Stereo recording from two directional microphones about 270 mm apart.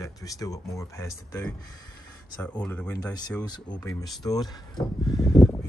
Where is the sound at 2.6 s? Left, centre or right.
Centre.